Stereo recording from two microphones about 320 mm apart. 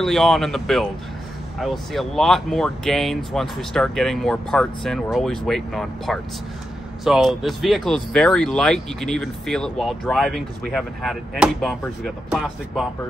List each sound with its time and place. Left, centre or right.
0.0 s speech: centre